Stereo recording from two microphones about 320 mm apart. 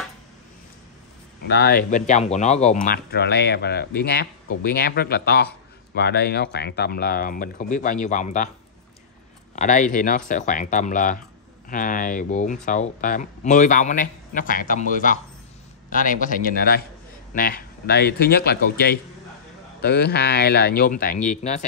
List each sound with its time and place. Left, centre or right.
1.5 s speech: left
9.6 s speech: left